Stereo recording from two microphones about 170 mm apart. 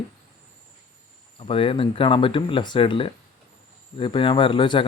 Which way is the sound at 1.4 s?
30° left (ahead or behind).